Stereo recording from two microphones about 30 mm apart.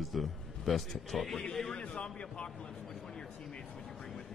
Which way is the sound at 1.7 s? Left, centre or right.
Left.